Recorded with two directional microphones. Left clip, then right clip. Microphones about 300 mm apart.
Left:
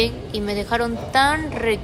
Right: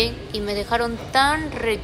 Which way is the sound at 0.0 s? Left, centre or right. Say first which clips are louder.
Left 1 dB; centre.